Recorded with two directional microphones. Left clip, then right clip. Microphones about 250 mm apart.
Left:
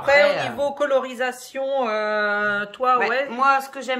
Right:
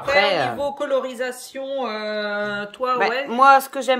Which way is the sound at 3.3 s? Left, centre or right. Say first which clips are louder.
Right 5 dB; right.